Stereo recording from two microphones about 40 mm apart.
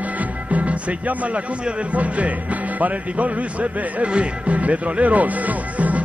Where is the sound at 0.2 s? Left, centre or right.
Right.